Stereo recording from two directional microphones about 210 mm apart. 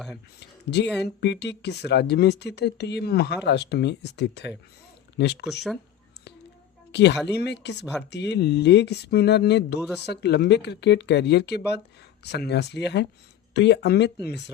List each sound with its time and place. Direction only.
0.3 s speech: 55° left (ahead or behind)
6.9 s speech: 55° left (ahead or behind)